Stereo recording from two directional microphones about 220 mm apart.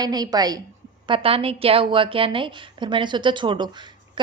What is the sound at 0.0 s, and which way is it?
A woman's voice, 20° right (ahead or behind).